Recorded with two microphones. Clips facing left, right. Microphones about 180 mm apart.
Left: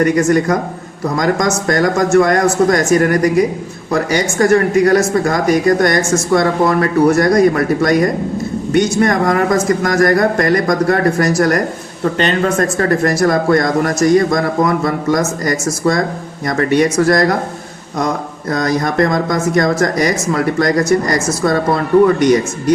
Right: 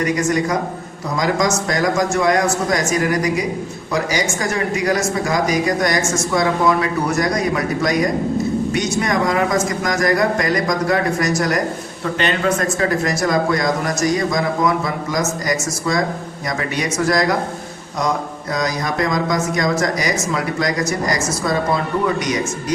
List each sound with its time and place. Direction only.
0.0 s a man's voice: 55° left (ahead or behind)
18.5 s a man's voice: 55° left (ahead or behind)